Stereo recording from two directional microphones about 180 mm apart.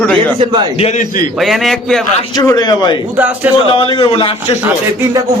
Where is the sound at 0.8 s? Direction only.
40° left (ahead or behind).